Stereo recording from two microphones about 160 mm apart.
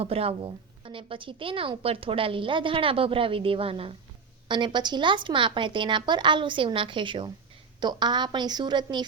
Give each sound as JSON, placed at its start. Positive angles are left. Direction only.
{"t": 0.0, "sound": "a woman's voice", "side_deg": -40}